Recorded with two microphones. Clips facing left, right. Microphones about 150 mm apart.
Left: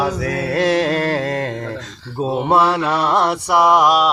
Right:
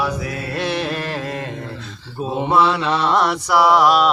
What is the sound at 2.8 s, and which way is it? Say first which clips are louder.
Mantra: left 1 dB; 25° right (ahead or behind).